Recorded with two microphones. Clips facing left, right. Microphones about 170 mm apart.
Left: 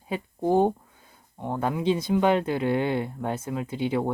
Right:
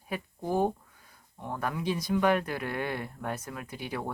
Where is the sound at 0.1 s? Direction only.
25° left (ahead or behind).